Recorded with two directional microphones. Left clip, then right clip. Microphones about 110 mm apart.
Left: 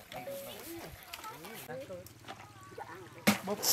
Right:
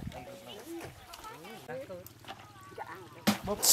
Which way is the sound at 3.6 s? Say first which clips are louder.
Right 5 dB; 20° right (ahead or behind).